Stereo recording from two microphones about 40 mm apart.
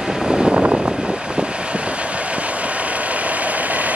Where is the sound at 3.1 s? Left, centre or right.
Right.